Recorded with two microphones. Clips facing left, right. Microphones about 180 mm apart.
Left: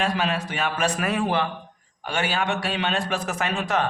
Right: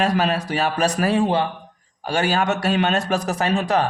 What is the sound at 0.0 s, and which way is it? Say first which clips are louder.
A man's voice: right 5 dB; 40° right (ahead or behind).